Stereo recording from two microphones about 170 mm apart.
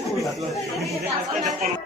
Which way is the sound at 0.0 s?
Centre (ahead or behind).